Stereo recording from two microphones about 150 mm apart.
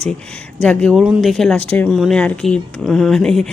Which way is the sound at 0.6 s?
5° left (ahead or behind).